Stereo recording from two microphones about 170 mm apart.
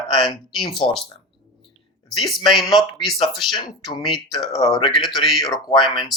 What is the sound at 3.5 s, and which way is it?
Speech, 25° left (ahead or behind).